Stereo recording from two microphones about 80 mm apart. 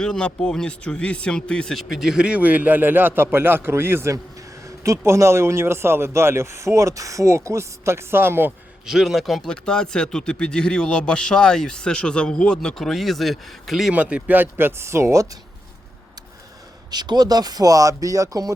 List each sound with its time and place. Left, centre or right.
0.0 s speech: centre; by 8.5 s right
8.9 s speech: centre
13.9 s speech: centre; by 15.3 s right
16.9 s speech: right